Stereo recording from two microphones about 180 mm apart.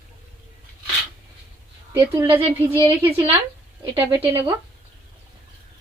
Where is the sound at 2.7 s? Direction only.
30° right (ahead or behind).